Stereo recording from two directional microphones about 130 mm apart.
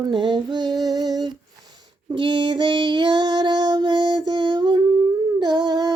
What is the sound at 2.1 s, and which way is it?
Child singing, 35° right (ahead or behind).